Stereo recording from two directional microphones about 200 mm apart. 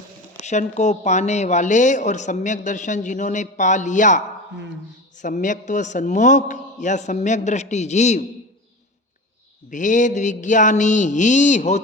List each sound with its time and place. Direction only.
0.4 s a woman's voice: 35° left (ahead or behind)
5.2 s a woman's voice: 40° left (ahead or behind)
9.6 s a woman's voice: 40° left (ahead or behind)